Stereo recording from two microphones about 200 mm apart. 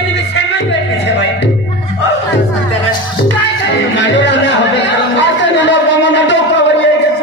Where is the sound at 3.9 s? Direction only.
65° left (ahead or behind).